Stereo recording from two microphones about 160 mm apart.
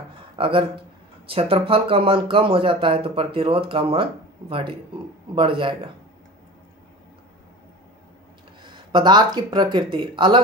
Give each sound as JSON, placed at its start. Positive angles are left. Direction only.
{"t": 0.4, "sound": "speech", "side_deg": -35}
{"t": 8.6, "sound": "speech", "side_deg": -30}